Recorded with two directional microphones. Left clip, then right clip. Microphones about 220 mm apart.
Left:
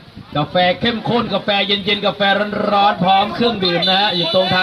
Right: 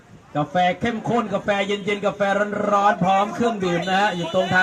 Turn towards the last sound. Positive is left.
turn(degrees=-40)  # may be behind; listen again after turning